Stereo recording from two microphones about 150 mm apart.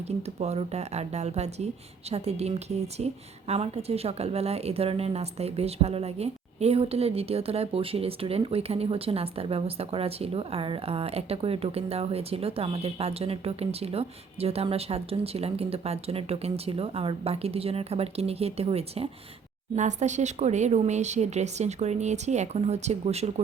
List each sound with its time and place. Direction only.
0.2 s a woman's voice: 45° right (ahead or behind)